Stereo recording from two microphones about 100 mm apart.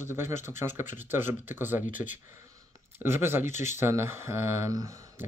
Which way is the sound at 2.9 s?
25° right (ahead or behind).